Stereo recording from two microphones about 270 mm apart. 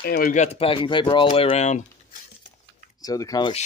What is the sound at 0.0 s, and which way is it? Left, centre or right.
Speech, left.